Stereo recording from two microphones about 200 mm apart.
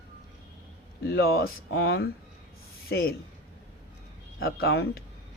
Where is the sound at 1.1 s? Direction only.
50° left (ahead or behind).